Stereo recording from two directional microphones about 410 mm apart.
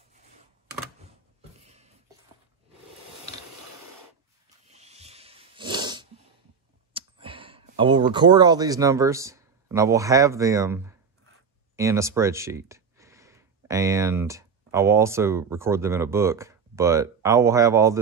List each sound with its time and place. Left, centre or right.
1.6 s a sound: centre
4.7 s dog: centre
6.9 s speech: centre